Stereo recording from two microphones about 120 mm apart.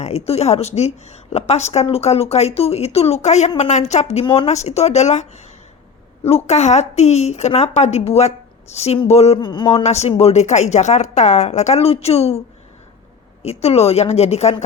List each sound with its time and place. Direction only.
0.0 s a woman's voice: 60° left (ahead or behind)
6.2 s a woman's voice: 60° left (ahead or behind)
9.4 s speech: 40° left (ahead or behind)
9.8 s a woman's voice: 65° left (ahead or behind)
13.4 s a woman's voice: 60° left (ahead or behind)